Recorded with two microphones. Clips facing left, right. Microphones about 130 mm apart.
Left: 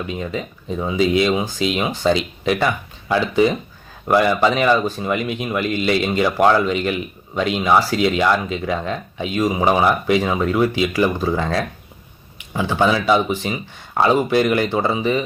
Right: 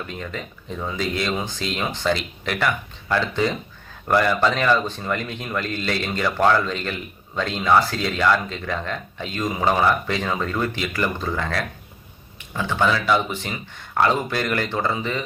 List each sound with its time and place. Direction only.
0.0 s speech: 15° left (ahead or behind)